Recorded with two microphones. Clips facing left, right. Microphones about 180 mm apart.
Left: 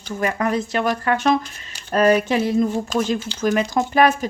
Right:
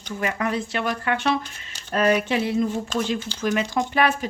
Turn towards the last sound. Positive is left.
turn(degrees=40)  # may be behind; listen again after turning